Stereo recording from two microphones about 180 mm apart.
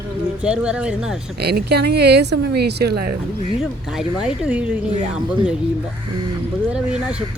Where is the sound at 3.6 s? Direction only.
5° right (ahead or behind).